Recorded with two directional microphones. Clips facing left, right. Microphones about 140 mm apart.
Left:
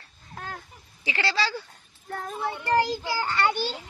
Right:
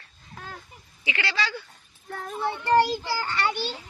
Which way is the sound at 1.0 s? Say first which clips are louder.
Left 2 dB; 35° left (ahead or behind).